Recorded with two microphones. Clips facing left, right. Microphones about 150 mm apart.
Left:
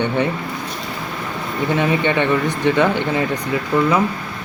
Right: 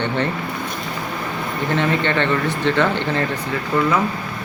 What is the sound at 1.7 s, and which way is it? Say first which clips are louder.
A man's voice: left 2 dB; 15° left (ahead or behind).